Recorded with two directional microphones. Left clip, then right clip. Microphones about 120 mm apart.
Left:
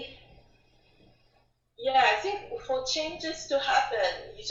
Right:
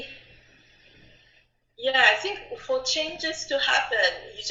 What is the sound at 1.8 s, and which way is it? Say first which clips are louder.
Speech: right 3 dB; 30° right (ahead or behind).